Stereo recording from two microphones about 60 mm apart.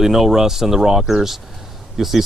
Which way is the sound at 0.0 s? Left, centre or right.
Centre.